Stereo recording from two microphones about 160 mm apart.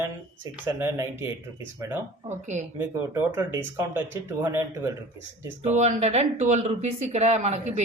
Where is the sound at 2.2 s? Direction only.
45° right (ahead or behind).